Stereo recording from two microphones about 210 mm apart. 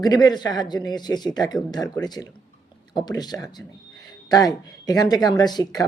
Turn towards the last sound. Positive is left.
turn(degrees=20)  # may be behind; listen again after turning